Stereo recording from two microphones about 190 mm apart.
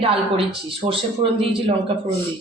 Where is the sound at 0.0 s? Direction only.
30° right (ahead or behind).